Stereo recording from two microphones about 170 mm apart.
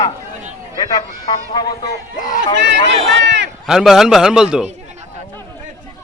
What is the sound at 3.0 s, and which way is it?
Speech, 90° right.